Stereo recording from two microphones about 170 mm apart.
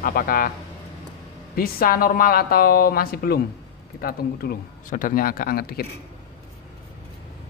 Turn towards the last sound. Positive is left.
turn(degrees=60)  # may be behind; listen again after turning